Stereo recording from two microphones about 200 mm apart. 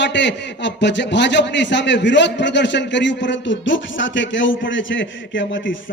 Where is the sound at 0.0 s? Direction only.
60° left (ahead or behind).